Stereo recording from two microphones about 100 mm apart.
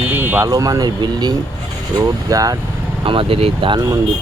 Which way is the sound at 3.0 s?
60° right (ahead or behind).